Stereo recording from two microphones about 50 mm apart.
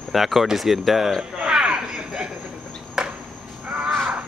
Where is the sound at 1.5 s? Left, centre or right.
Centre.